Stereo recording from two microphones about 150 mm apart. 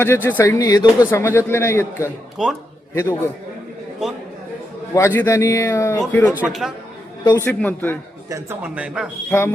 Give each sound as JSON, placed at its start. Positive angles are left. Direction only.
{"t": 0.0, "sound": "speech", "side_deg": 15}
{"t": 0.6, "sound": "speech", "side_deg": 25}
{"t": 2.4, "sound": "speech", "side_deg": -5}
{"t": 2.9, "sound": "a man's voice", "side_deg": 20}
{"t": 4.9, "sound": "a man's voice", "side_deg": 15}
{"t": 6.3, "sound": "speech", "side_deg": -5}
{"t": 7.3, "sound": "speech", "side_deg": 10}
{"t": 8.3, "sound": "speech", "side_deg": -15}